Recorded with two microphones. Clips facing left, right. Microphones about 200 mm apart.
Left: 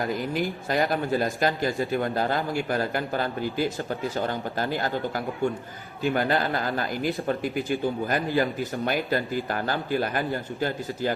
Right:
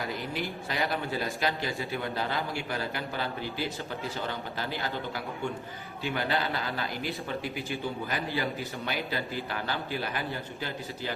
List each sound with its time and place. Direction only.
0.1 s speech: 45° left (ahead or behind)